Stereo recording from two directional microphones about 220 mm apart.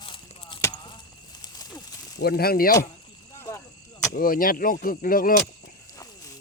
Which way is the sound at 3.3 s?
10° left (ahead or behind).